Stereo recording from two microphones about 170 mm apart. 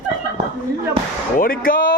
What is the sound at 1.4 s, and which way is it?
Speech, 55° left (ahead or behind).